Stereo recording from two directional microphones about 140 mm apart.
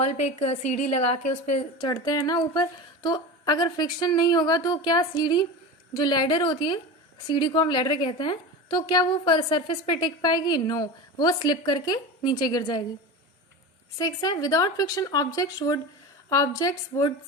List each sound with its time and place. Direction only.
0.1 s a woman's voice: 50° left (ahead or behind)
1.8 s a woman's voice: 30° left (ahead or behind)
14.0 s a woman's voice: 30° left (ahead or behind)